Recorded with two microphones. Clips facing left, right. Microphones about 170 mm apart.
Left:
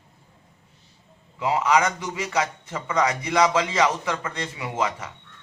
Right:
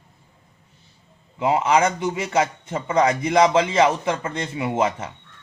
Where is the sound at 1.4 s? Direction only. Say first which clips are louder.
Right 3 dB; 25° right (ahead or behind).